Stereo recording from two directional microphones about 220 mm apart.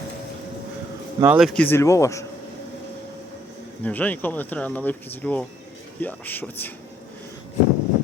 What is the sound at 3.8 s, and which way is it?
Speech, 5° left (ahead or behind).